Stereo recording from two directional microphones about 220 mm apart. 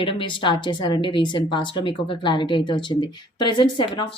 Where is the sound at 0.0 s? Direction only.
25° left (ahead or behind).